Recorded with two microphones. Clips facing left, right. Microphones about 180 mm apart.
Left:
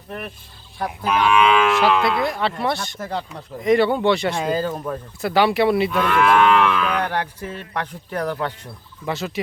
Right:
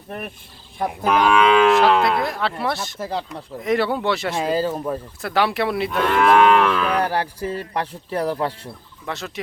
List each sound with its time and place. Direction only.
1.0 s moo: 40° right (ahead or behind)
1.7 s speech: centre (ahead or behind)
6.1 s moo: 40° right (ahead or behind)
9.0 s speech: centre (ahead or behind)